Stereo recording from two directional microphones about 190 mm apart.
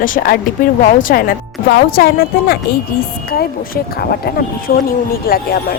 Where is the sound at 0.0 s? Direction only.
45° left (ahead or behind).